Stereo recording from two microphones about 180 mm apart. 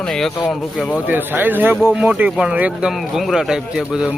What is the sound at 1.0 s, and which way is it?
A man's voice, 10° right (ahead or behind).